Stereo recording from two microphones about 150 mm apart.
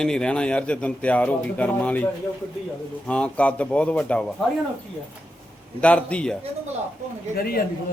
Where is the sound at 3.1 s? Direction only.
10° left (ahead or behind).